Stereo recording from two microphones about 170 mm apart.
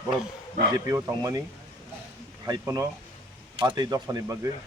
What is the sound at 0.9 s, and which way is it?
Speech, 15° right (ahead or behind).